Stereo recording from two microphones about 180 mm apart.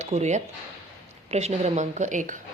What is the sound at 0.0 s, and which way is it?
A woman's voice, 40° right (ahead or behind).